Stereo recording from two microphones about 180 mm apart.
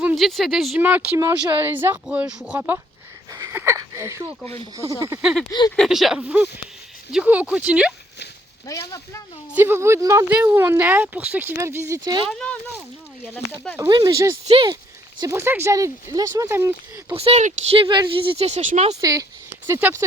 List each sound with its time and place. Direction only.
0.0 s speech: 5° right (ahead or behind)
5.2 s speech: 5° right (ahead or behind)
5.5 s speech: 20° left (ahead or behind)
5.7 s speech: centre (ahead or behind)
8.9 s speech: 15° left (ahead or behind)
9.6 s speech: 10° right (ahead or behind)
12.3 s speech: 5° left (ahead or behind)
13.7 s speech: 20° right (ahead or behind)
14.4 s speech: 30° right (ahead or behind)
15.2 s speech: 15° right (ahead or behind)
17.2 s speech: 35° right (ahead or behind)
17.8 s speech: 25° right (ahead or behind)
18.9 s speech: 20° right (ahead or behind)